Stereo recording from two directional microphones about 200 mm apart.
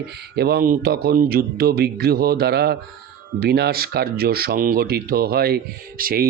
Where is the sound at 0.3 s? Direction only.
50° right (ahead or behind).